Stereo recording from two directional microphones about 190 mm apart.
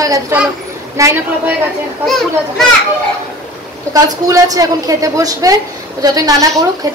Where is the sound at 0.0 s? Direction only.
15° right (ahead or behind).